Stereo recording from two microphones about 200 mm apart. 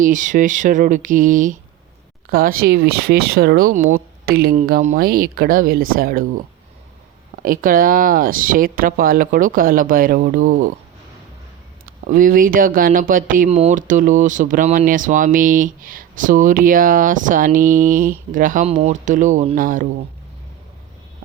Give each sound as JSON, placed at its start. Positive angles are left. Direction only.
{"t": 0.0, "sound": "speech", "side_deg": -40}
{"t": 7.4, "sound": "speech", "side_deg": -45}
{"t": 11.9, "sound": "speech", "side_deg": -40}